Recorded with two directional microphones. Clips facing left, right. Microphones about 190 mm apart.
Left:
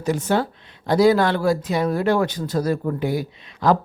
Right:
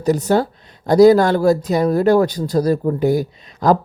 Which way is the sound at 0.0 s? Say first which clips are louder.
Right 5 dB; 40° right (ahead or behind).